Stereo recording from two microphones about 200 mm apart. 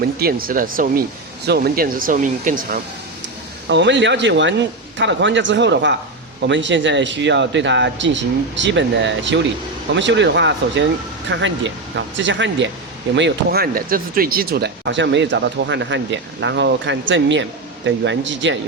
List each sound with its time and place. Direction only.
0.2 s speech: 50° right (ahead or behind)
3.7 s speech: 65° right (ahead or behind)